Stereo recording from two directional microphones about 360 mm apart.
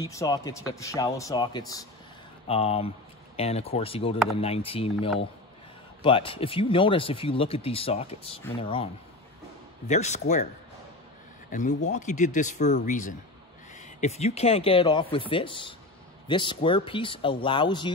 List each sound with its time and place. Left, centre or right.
0.0 s speech: centre
9.8 s speech: centre
11.5 s speech: centre